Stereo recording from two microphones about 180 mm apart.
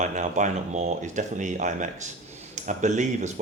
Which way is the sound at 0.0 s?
45° right (ahead or behind).